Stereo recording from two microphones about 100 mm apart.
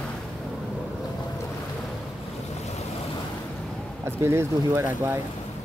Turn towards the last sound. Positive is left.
turn(degrees=-25)  # may be behind; listen again after turning